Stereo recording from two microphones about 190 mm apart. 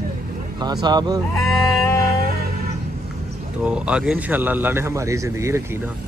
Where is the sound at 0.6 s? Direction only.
20° right (ahead or behind).